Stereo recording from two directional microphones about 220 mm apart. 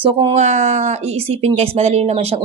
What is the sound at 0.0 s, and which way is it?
Speech, 25° right (ahead or behind).